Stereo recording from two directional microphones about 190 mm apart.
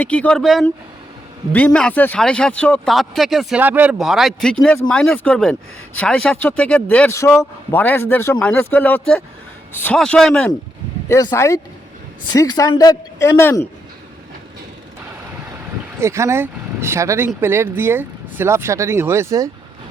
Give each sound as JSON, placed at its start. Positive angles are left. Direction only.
{"t": 0.0, "sound": "speech", "side_deg": 5}
{"t": 16.0, "sound": "speech", "side_deg": -15}